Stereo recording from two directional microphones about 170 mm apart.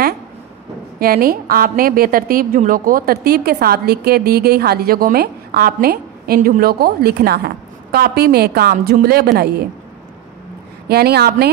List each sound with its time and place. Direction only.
0.9 s a woman's voice: 60° right (ahead or behind)
10.9 s a woman's voice: 70° right (ahead or behind)